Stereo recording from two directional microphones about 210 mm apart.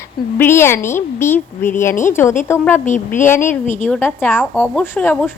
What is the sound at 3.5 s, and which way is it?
Speech, 35° left (ahead or behind).